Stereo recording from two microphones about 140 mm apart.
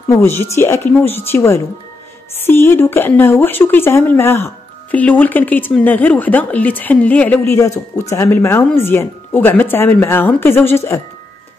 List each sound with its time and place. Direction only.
0.1 s speech: 15° left (ahead or behind)